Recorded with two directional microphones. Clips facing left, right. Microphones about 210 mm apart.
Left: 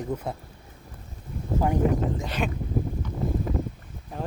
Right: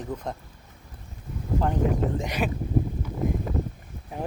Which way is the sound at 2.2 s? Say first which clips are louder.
Right 1 dB; 15° right (ahead or behind).